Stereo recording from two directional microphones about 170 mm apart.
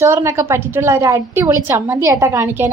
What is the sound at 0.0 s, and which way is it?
A woman's voice, 15° right (ahead or behind).